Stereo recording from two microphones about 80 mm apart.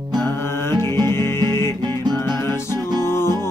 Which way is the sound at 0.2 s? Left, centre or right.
Left.